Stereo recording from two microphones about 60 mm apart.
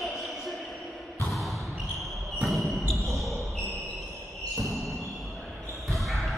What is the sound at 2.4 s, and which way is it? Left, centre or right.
Basketball bounce, centre.